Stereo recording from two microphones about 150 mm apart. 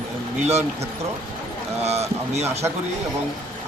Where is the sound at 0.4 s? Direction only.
45° right (ahead or behind).